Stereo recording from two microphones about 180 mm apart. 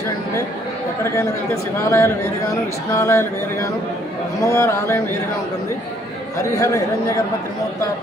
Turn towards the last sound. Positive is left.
turn(degrees=15)  # may be behind; listen again after turning